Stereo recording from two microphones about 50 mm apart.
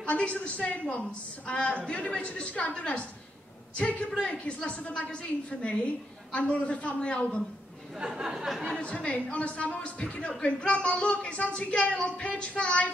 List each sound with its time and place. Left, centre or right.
0.0 s speech: left
8.0 s speech: centre
8.5 s speech: centre
8.7 s speech: left